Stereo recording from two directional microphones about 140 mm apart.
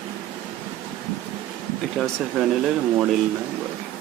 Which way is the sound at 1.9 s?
Centre (ahead or behind).